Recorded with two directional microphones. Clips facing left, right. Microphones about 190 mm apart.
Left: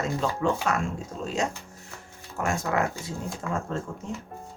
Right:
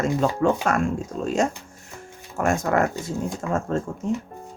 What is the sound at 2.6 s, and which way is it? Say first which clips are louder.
Speech: right 5 dB; 50° right (ahead or behind).